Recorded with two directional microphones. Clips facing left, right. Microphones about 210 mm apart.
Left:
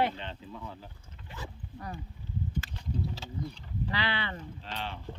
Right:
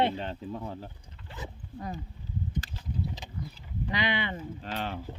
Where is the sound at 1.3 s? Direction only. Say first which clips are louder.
Right 2 dB; 20° right (ahead or behind).